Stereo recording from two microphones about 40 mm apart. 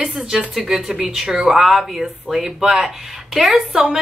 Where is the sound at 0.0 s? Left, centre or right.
Centre.